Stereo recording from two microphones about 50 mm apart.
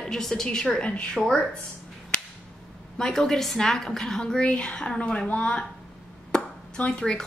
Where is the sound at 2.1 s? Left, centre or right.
Centre.